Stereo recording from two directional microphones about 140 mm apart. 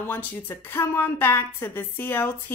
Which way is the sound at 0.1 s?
15° left (ahead or behind).